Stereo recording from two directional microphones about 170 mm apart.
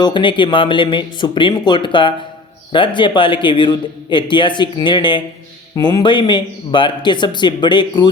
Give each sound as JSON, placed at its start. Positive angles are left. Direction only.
{"t": 0.0, "sound": "a man's voice", "side_deg": 30}